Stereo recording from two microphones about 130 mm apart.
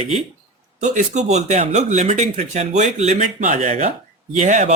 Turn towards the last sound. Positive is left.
turn(degrees=-65)  # may be behind; listen again after turning